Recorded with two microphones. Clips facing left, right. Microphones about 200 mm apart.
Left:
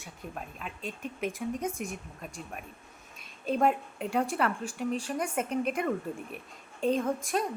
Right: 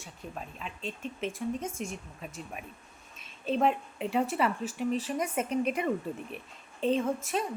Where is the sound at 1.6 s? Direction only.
15° left (ahead or behind).